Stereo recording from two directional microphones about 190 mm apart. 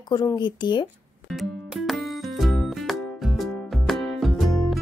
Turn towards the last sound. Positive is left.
turn(degrees=0)  # may be behind; listen again after turning